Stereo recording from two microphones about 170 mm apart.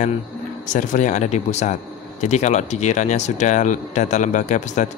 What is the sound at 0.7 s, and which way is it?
Speech, 50° left (ahead or behind).